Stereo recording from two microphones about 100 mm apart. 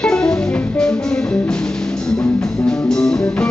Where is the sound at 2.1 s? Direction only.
5° left (ahead or behind).